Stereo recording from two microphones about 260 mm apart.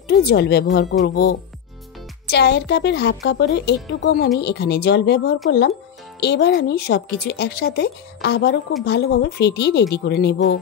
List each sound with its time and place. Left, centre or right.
0.2 s speech: left
2.3 s speech: left